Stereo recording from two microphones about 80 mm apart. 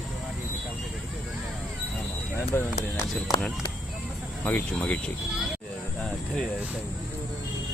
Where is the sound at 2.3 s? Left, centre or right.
Left.